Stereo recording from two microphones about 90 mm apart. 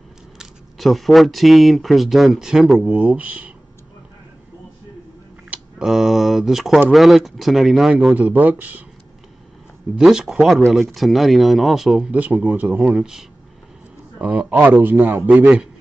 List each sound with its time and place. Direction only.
0.4 s speech: centre (ahead or behind)
2.9 s speech: 15° right (ahead or behind)
5.5 s speech: 5° right (ahead or behind)
8.1 s a man's voice: 20° right (ahead or behind)
9.9 s speech: 10° right (ahead or behind)
12.1 s speech: 15° right (ahead or behind)
12.9 s a man's voice: 5° right (ahead or behind)